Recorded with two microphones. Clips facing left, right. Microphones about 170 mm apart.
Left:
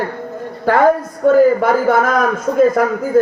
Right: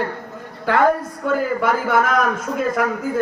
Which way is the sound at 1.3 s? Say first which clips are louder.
Left 9 dB; 40° left (ahead or behind).